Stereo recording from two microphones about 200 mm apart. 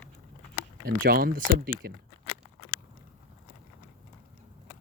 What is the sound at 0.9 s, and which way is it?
Speech, 50° right (ahead or behind).